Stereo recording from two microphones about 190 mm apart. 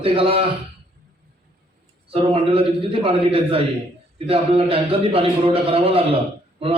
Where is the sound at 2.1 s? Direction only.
30° right (ahead or behind).